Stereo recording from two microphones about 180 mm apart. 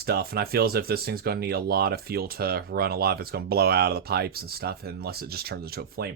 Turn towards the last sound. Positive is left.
turn(degrees=-60)  # may be behind; listen again after turning